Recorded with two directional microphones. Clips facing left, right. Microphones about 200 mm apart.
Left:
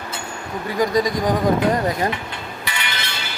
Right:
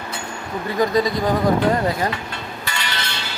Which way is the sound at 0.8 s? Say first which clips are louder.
Even; 15° left (ahead or behind).